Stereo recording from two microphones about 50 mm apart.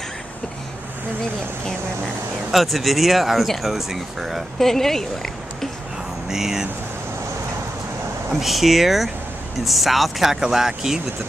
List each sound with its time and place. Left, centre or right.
2.5 s speech: centre
4.6 s speech: centre
6.2 s speech: centre
8.3 s speech: centre